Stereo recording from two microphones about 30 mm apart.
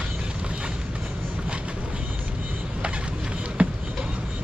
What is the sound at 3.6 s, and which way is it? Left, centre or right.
Basketball bounce, right.